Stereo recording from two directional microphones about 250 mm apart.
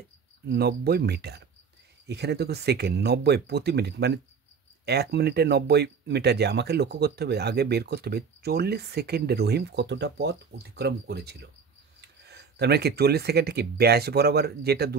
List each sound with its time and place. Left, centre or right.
0.5 s speech: right